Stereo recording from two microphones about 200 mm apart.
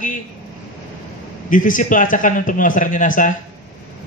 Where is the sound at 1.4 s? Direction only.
40° left (ahead or behind).